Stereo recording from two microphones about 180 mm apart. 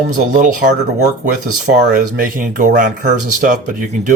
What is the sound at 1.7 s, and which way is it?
Speech, 55° right (ahead or behind).